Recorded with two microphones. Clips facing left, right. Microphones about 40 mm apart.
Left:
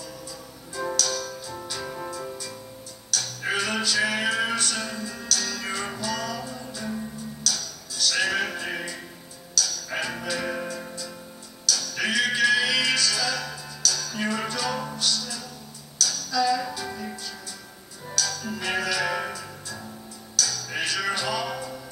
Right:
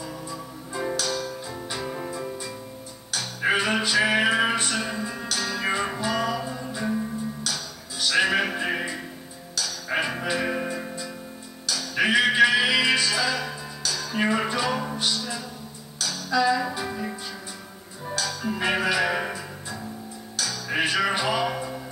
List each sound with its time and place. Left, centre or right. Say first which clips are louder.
0.0 s music: right 4 dB; right
18.1 s music: right 2 dB; right